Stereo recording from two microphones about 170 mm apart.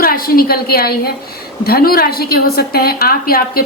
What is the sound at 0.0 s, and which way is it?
A woman's voice, 60° left (ahead or behind).